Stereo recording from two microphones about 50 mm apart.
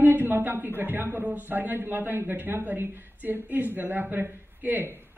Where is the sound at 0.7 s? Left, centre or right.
Right.